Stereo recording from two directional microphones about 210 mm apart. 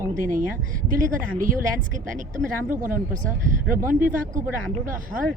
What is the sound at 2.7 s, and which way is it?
Speech, 40° right (ahead or behind).